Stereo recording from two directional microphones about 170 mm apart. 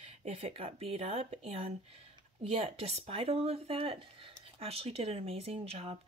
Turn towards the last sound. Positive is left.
turn(degrees=-35)  # may be behind; listen again after turning